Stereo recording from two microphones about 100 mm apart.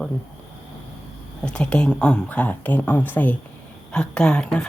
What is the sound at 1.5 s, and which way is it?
Speech, 10° left (ahead or behind).